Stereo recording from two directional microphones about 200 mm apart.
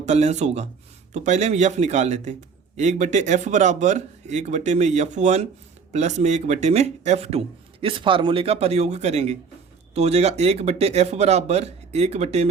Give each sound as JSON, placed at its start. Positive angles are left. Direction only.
{"t": 0.0, "sound": "speech", "side_deg": -35}